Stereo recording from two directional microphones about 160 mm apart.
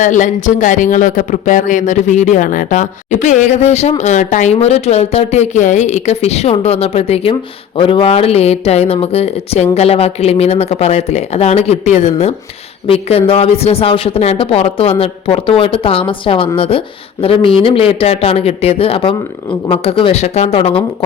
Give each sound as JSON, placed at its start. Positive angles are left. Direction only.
{"t": 0.0, "sound": "speech", "side_deg": 50}